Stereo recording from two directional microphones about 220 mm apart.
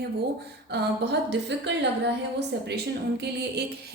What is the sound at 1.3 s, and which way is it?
Speech, 50° right (ahead or behind).